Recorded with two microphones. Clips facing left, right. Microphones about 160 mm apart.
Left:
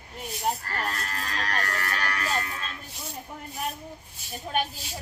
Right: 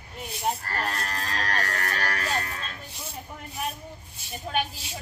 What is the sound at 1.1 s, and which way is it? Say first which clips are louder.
Livestock: right 1 dB; 40° right (ahead or behind).